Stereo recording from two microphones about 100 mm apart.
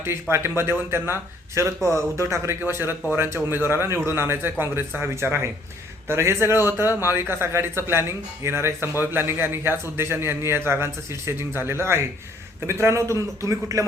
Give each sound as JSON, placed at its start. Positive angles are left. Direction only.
{"t": 0.0, "sound": "speech", "side_deg": -25}